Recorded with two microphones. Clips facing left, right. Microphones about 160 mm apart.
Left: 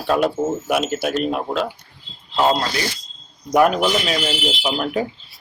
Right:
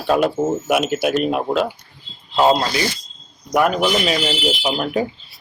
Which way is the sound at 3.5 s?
Centre (ahead or behind).